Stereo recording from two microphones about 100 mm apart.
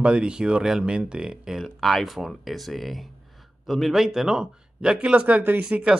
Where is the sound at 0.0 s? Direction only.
10° right (ahead or behind).